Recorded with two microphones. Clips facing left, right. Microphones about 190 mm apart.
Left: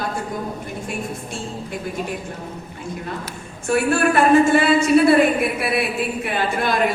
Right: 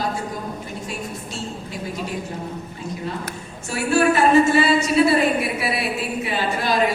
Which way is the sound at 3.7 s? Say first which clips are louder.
Left 1 dB; 55° left (ahead or behind).